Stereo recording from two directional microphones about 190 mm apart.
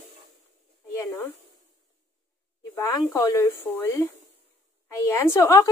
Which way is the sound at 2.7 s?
15° left (ahead or behind).